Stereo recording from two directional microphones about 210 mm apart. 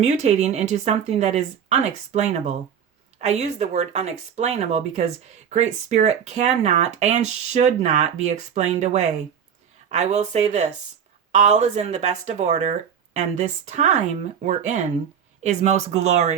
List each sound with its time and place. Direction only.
0.0 s speech: 30° right (ahead or behind)